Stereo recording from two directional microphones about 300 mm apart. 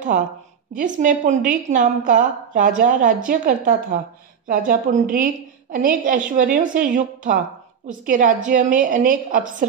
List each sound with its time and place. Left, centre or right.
0.7 s a woman's voice: right